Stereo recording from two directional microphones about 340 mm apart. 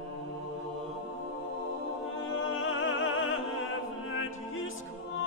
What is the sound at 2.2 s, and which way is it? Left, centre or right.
Music, left.